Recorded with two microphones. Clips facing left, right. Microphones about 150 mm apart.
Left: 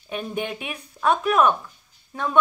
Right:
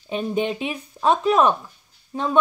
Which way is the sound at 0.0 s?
25° right (ahead or behind).